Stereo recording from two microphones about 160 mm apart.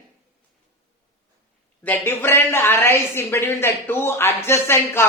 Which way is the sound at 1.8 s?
10° left (ahead or behind).